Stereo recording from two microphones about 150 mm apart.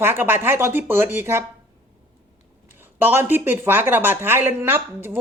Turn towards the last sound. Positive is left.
turn(degrees=-15)  # may be behind; listen again after turning